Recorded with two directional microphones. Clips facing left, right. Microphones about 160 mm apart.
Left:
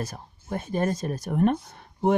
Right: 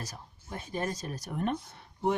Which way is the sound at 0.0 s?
50° left (ahead or behind).